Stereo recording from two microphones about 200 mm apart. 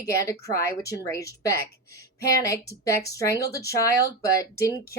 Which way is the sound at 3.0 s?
15° left (ahead or behind).